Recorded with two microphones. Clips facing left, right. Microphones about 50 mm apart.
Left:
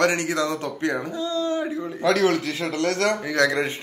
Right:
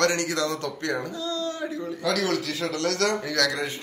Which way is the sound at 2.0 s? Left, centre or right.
Left.